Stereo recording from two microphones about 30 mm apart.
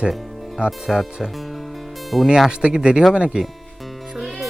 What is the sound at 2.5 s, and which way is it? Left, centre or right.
Speech, right.